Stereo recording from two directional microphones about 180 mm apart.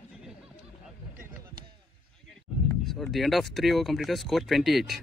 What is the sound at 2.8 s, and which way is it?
Speech, centre (ahead or behind).